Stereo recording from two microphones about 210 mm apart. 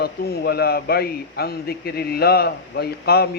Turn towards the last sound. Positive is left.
turn(degrees=50)  # may be behind; listen again after turning